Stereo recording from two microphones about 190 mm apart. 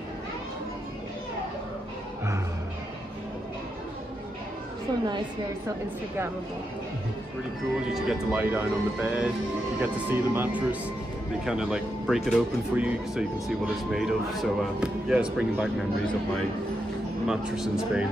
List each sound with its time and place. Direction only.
7.9 s speech: 5° right (ahead or behind)
17.3 s speech: 5° right (ahead or behind)